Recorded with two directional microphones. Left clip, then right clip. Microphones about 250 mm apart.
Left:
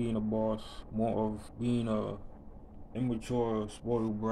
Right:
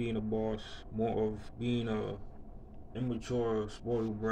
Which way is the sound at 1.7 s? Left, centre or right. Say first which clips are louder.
Left 2 dB; left.